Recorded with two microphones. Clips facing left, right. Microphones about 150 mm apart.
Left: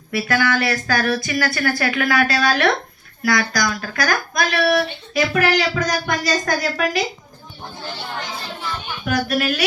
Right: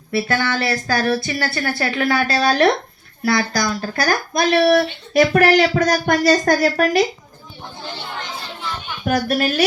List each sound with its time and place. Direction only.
0.1 s speech: 30° right (ahead or behind)
4.7 s speech: 45° right (ahead or behind)
9.0 s speech: 40° right (ahead or behind)